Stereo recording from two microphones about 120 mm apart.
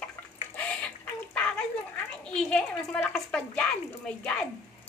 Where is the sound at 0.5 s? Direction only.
10° left (ahead or behind).